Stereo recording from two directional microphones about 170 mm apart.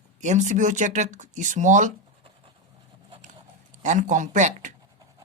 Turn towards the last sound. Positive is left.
turn(degrees=-45)  # may be behind; listen again after turning